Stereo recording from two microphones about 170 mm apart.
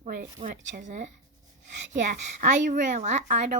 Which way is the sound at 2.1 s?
50° right (ahead or behind).